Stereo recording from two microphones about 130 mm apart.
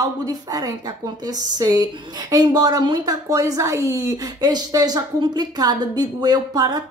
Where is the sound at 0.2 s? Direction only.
30° right (ahead or behind).